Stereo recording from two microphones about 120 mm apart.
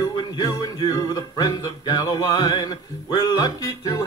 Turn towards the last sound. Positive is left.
turn(degrees=30)  # may be behind; listen again after turning